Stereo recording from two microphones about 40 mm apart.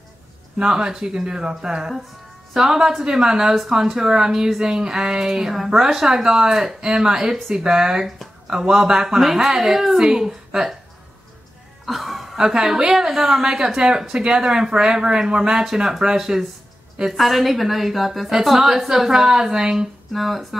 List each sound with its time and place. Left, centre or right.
0.6 s speech: centre
11.8 s music: centre
12.4 s speech: centre
20.1 s speech: centre